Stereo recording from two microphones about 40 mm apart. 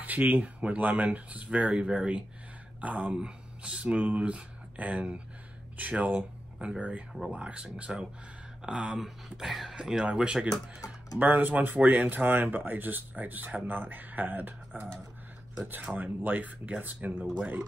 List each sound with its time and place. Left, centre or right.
0.0 s speech: right
2.8 s speech: right
3.2 s speech: right
9.0 s speech: centre
9.8 s speech: centre
11.1 s speech: right
13.6 s speech: right
16.0 s speech: right